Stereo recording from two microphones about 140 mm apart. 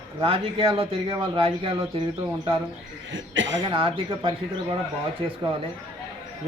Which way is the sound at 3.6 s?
40° right (ahead or behind).